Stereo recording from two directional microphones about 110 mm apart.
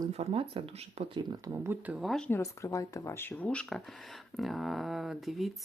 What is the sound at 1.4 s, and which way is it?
Speech, 25° right (ahead or behind).